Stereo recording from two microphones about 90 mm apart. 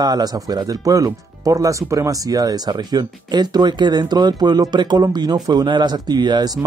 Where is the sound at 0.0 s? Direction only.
45° right (ahead or behind).